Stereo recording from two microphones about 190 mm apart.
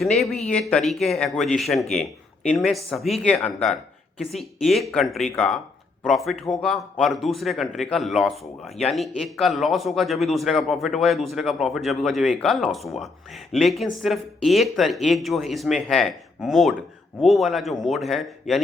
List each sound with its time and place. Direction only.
0.0 s speech: centre (ahead or behind)